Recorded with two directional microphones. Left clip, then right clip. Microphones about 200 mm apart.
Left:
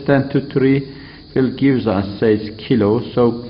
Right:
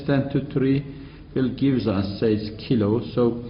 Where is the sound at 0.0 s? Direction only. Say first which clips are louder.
Left 8 dB; 35° left (ahead or behind).